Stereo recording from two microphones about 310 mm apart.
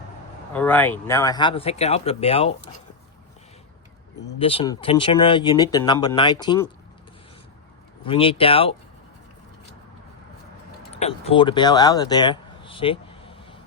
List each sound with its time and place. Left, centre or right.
0.5 s speech: centre
4.4 s speech: centre
8.0 s speech: centre
10.9 s speech: centre